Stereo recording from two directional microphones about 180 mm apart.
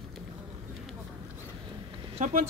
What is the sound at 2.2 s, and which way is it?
Speech, 45° right (ahead or behind).